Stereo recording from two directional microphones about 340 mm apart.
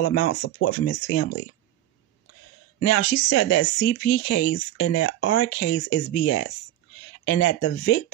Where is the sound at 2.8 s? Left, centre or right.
Left.